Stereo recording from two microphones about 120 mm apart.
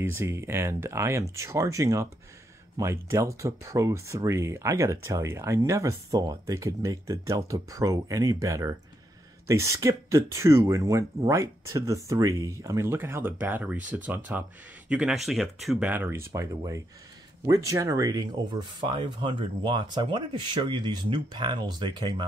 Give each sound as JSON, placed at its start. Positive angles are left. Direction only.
{"t": 0.0, "sound": "speech", "side_deg": -20}
{"t": 15.9, "sound": "speech", "side_deg": -20}